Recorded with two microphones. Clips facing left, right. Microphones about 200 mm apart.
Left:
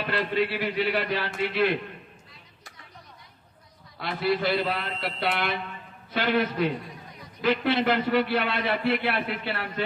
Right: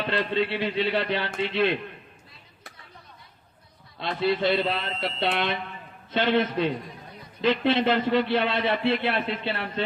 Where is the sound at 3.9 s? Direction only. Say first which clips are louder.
Right 1 dB; 25° right (ahead or behind).